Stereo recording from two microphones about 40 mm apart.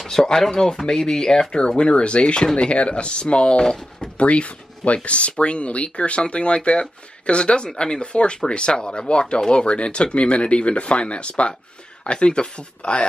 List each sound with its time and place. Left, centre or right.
0.0 s speech: centre; by 13.0 s left